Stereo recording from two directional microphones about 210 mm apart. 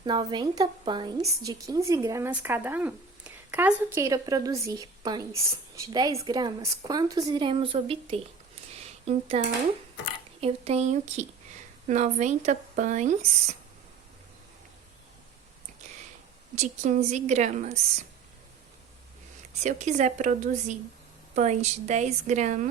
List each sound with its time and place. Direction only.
0.0 s a woman's voice: 20° right (ahead or behind)
10.4 s speech: 30° right (ahead or behind)
16.6 s speech: 30° right (ahead or behind)
19.5 s speech: 35° right (ahead or behind)